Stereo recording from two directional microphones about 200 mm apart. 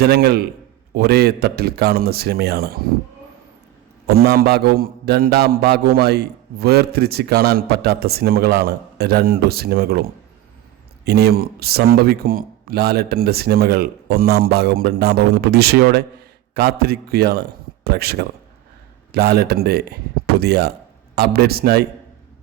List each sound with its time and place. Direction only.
0.0 s a man's voice: 50° right (ahead or behind)
4.0 s a man's voice: 50° right (ahead or behind)